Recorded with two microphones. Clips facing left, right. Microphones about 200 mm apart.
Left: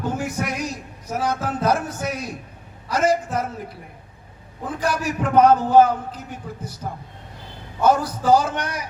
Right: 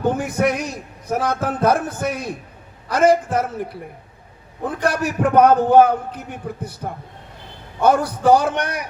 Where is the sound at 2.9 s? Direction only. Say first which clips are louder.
Right 5 dB; 60° right (ahead or behind).